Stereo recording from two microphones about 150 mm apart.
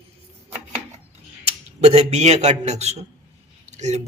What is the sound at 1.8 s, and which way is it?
A man's voice, 45° right (ahead or behind).